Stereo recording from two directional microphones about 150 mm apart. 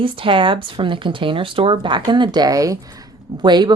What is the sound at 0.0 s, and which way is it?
A woman's voice, 35° right (ahead or behind).